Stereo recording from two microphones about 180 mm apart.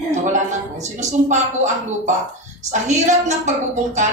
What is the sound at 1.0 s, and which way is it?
Speech, 40° right (ahead or behind).